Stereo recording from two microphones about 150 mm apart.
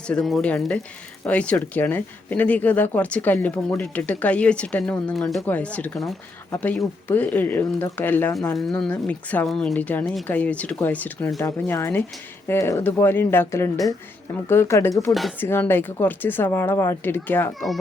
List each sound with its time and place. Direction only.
0.1 s speech: centre (ahead or behind); by 8.5 s 20° left (ahead or behind)
8.7 s speech: 10° left (ahead or behind)